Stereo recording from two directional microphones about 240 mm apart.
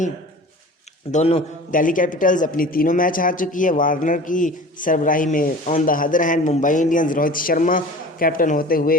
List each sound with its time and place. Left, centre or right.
1.1 s a man's voice: left